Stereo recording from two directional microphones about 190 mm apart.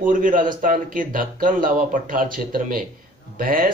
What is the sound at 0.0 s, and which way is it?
Speech, 45° right (ahead or behind).